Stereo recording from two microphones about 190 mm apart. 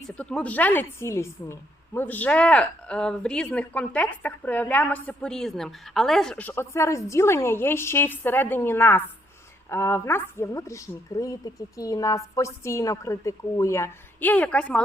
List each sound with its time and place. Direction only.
0.0 s a woman's voice: 5° left (ahead or behind)